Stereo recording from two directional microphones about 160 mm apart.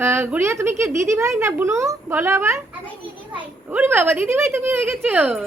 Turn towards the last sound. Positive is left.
turn(degrees=-5)  # may be behind; listen again after turning